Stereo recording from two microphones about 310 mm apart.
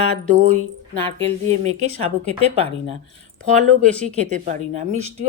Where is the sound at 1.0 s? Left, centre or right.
Right.